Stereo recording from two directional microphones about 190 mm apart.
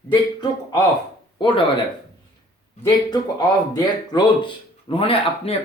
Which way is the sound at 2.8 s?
20° left (ahead or behind).